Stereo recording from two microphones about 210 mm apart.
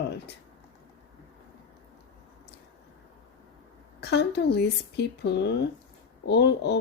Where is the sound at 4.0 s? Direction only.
50° left (ahead or behind).